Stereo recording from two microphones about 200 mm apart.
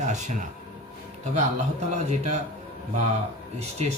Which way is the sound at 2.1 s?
35° right (ahead or behind).